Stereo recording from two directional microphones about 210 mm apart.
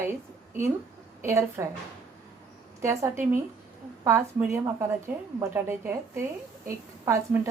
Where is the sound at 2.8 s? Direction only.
15° right (ahead or behind).